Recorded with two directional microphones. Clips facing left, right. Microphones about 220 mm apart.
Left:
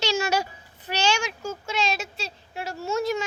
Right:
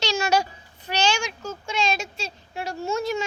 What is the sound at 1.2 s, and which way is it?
A child's voice, 5° left (ahead or behind).